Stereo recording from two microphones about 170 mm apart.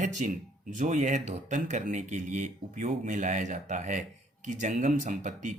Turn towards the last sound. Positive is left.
turn(degrees=-50)  # may be behind; listen again after turning